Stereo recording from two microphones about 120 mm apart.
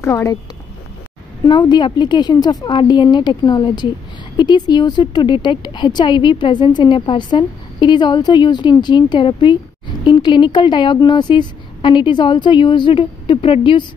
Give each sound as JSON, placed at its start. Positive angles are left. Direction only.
{"t": 0.0, "sound": "a woman's voice", "side_deg": 20}
{"t": 1.5, "sound": "speech", "side_deg": 40}